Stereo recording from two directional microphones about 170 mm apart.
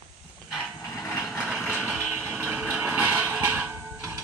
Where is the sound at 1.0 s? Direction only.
15° left (ahead or behind).